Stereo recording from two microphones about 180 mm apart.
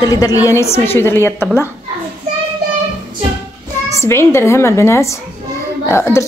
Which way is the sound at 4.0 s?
15° left (ahead or behind).